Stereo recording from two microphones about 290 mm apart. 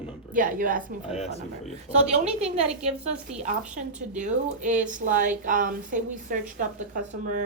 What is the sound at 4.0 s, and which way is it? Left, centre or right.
A woman's voice, right.